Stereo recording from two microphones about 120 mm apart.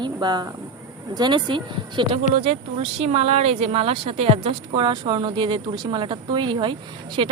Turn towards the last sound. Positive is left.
turn(degrees=-45)  # may be behind; listen again after turning